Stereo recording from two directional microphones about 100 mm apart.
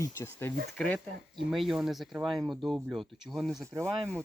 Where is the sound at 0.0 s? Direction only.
30° left (ahead or behind).